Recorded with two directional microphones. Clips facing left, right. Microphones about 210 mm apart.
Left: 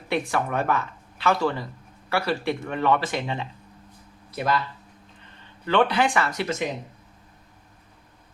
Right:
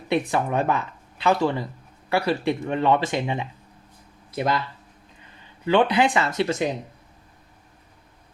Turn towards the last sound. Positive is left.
turn(degrees=-25)  # may be behind; listen again after turning